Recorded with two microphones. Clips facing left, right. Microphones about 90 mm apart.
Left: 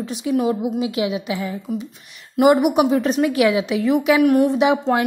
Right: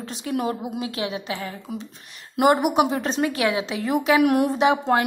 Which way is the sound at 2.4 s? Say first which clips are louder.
Left 4 dB; centre (ahead or behind).